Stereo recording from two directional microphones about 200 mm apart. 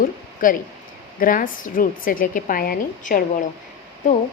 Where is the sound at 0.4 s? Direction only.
40° left (ahead or behind).